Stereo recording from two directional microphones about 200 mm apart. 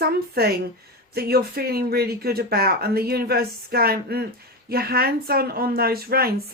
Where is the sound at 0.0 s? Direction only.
50° right (ahead or behind).